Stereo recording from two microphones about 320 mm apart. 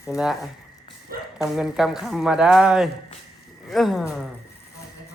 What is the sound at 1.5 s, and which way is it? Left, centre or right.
Speech, centre.